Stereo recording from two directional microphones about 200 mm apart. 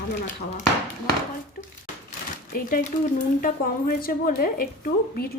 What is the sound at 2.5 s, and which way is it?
A woman's voice, 45° left (ahead or behind).